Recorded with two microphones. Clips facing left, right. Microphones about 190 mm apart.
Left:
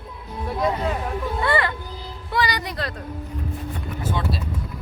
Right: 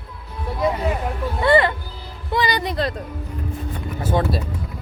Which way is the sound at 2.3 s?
25° right (ahead or behind).